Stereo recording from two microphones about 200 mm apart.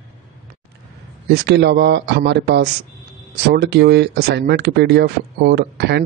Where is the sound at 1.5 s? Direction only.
55° right (ahead or behind).